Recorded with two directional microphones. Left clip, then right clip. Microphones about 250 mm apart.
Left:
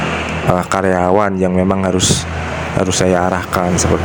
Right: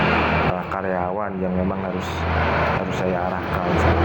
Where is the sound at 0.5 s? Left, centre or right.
Left.